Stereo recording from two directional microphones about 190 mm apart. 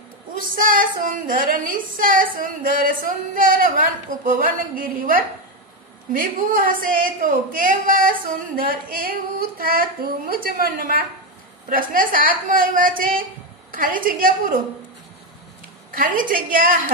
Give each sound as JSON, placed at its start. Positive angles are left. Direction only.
{"t": 0.4, "sound": "a woman's voice", "side_deg": -45}
{"t": 16.2, "sound": "a woman's voice", "side_deg": -45}